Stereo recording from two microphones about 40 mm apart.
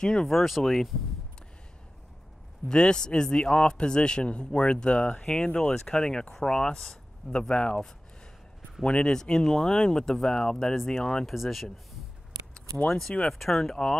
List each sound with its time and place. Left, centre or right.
0.0 s speech: left
0.3 s speech: centre
2.7 s speech: left
7.3 s speech: left
8.8 s speech: left
9.1 s speech: centre
11.2 s speech: centre
12.8 s speech: centre
13.3 s speech: centre